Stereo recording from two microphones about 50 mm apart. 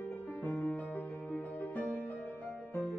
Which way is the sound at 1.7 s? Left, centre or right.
Left.